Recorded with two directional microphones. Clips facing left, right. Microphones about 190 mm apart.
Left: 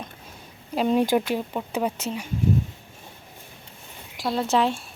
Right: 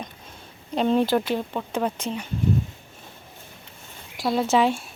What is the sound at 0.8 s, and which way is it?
Speech, 10° left (ahead or behind).